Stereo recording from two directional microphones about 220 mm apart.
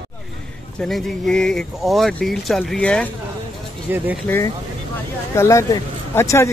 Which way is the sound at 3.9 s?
10° right (ahead or behind).